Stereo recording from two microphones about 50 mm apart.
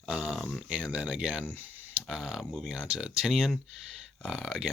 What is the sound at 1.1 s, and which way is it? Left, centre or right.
Speech, centre.